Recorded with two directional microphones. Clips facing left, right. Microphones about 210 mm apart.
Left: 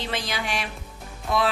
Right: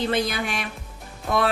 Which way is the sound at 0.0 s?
55° right (ahead or behind).